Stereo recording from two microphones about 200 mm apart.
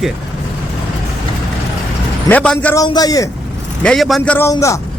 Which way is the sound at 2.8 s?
20° left (ahead or behind).